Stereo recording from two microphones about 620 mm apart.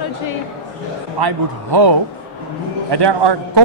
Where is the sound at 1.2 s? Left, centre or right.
Right.